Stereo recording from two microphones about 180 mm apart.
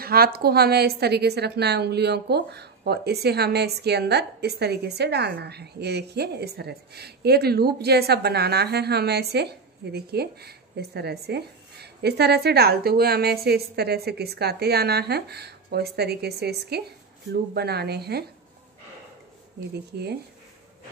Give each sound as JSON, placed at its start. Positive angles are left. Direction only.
{"t": 0.0, "sound": "a woman's voice", "side_deg": -55}